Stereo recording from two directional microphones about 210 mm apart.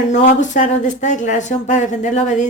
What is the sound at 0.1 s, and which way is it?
Speech, 35° left (ahead or behind).